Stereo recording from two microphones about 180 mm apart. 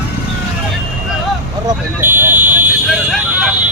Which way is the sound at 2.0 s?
10° right (ahead or behind).